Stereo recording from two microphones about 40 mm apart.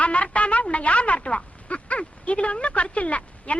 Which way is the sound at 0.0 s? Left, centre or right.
Left.